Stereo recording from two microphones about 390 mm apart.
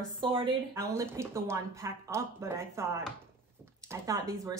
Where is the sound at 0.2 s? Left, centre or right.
Centre.